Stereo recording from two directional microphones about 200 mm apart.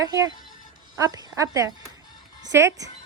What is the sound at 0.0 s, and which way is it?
Speech, 20° right (ahead or behind).